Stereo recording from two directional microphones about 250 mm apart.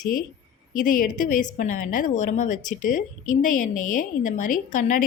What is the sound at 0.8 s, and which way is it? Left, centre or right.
A woman's voice, left.